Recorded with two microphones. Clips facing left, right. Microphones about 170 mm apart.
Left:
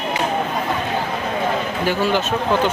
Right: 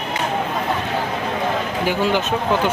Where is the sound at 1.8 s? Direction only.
15° right (ahead or behind).